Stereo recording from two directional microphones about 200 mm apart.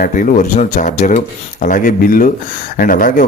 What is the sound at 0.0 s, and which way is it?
Speech, 40° left (ahead or behind).